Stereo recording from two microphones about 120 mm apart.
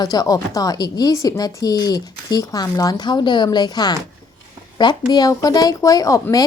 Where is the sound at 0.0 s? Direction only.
30° left (ahead or behind).